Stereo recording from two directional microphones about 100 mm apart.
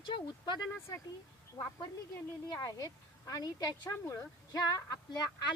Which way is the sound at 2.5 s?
40° left (ahead or behind).